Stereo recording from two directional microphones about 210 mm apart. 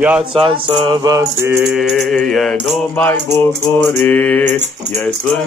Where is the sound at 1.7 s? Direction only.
Centre (ahead or behind).